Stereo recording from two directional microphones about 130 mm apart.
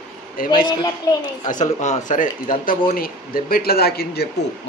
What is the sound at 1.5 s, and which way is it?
Speech, 70° left (ahead or behind).